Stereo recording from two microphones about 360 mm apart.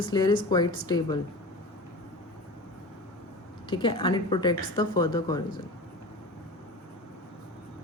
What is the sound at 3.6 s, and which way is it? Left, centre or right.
Speech, centre.